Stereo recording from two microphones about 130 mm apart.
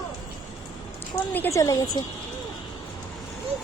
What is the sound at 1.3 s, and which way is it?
Speech, 20° left (ahead or behind).